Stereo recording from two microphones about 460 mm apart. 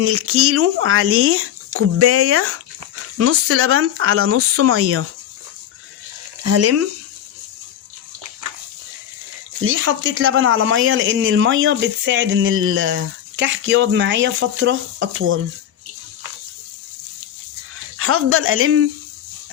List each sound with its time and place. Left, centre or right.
0.0 s speech: right
6.4 s speech: right
9.6 s speech: right
17.9 s speech: right